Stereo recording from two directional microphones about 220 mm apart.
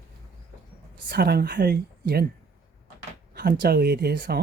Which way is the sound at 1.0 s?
45° right (ahead or behind).